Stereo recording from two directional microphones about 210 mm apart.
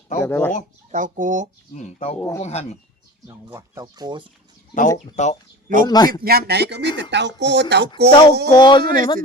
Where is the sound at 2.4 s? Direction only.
30° left (ahead or behind).